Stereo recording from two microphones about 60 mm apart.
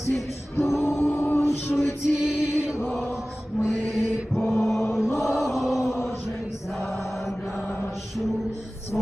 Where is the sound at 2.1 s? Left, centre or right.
Left.